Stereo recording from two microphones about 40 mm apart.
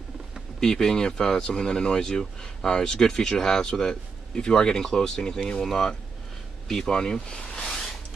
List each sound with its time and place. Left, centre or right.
0.6 s speech: centre